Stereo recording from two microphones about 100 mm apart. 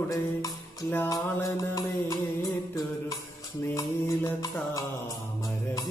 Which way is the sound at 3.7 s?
25° left (ahead or behind).